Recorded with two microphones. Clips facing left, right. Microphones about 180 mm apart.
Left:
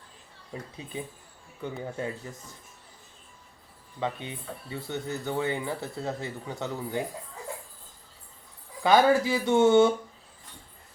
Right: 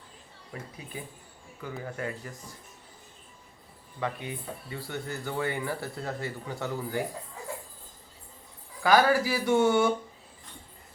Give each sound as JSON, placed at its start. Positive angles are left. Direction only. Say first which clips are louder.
{"t": 0.8, "sound": "speech", "louder": "left 2 dB", "side_deg": 25}
{"t": 4.0, "sound": "speech", "louder": "left 1 dB", "side_deg": 25}
{"t": 8.8, "sound": "speech", "louder": "left 2 dB", "side_deg": 25}